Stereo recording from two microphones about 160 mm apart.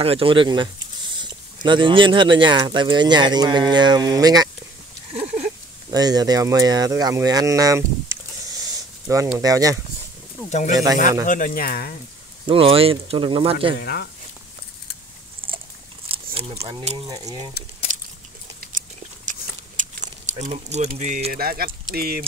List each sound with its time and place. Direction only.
0.0 s speech: 35° right (ahead or behind)
5.9 s speech: 25° right (ahead or behind)
11.2 s speech: 55° left (ahead or behind)
12.4 s speech: 35° right (ahead or behind)
16.3 s speech: 35° right (ahead or behind)
17.1 s speech: 20° right (ahead or behind)
17.9 s a sound: 50° right (ahead or behind)
18.6 s dog: 55° right (ahead or behind)
19.8 s keys jangling: 55° right (ahead or behind)
20.2 s speech: 50° right (ahead or behind); by 22.2 s 70° right (ahead or behind)